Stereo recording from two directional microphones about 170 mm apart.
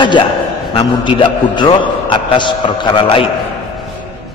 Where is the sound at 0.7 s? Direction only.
30° left (ahead or behind).